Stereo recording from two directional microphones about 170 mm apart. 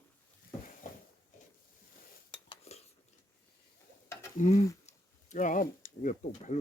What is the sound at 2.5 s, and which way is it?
Cutlery, 40° left (ahead or behind).